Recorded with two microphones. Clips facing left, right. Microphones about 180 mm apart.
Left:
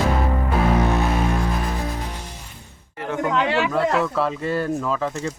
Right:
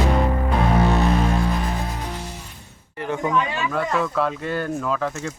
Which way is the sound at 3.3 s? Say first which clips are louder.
Left 3 dB; 75° left (ahead or behind).